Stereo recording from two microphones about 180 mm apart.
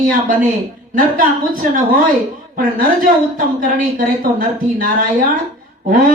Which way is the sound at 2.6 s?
50° right (ahead or behind).